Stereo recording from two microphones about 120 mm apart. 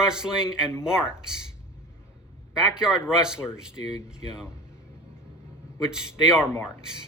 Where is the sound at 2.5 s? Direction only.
5° right (ahead or behind).